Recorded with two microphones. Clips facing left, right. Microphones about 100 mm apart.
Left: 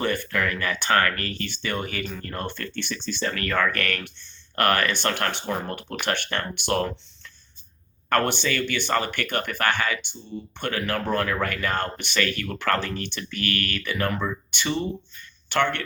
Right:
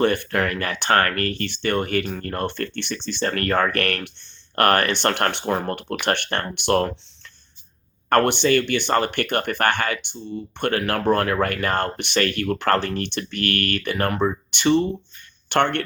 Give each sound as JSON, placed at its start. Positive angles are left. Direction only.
{"t": 0.0, "sound": "speech", "side_deg": -55}
{"t": 8.1, "sound": "speech", "side_deg": -55}